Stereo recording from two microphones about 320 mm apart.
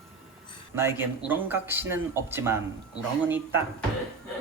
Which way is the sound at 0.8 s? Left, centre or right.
Centre.